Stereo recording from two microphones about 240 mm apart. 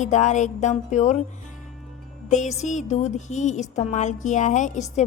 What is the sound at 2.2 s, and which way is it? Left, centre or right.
Speech, left.